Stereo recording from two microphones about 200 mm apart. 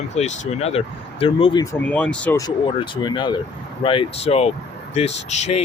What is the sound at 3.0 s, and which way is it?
Speech, 20° left (ahead or behind).